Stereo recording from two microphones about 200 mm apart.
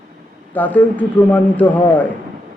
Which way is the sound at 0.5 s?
10° left (ahead or behind).